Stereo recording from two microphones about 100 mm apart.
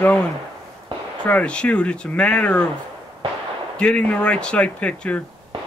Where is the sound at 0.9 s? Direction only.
60° right (ahead or behind).